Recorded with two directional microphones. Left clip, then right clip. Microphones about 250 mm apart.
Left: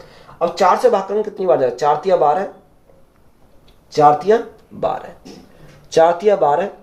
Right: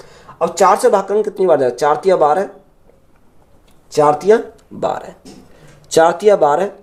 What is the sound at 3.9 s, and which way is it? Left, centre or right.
Speech, right.